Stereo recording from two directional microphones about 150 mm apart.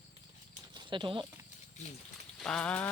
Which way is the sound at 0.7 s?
30° right (ahead or behind).